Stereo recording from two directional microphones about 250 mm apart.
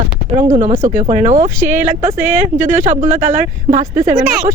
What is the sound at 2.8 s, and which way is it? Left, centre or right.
Speech, right.